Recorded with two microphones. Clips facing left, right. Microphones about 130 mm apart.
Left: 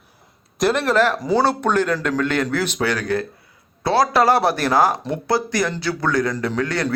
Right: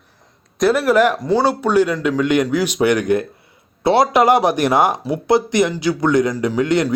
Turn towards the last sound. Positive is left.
turn(degrees=-20)  # may be behind; listen again after turning